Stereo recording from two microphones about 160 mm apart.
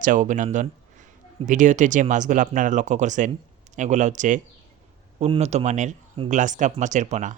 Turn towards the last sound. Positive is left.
turn(degrees=-50)  # may be behind; listen again after turning